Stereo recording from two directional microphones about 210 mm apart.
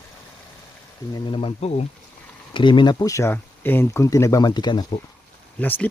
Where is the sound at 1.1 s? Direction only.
25° left (ahead or behind).